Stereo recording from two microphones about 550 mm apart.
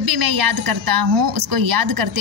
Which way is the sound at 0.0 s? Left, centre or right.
Right.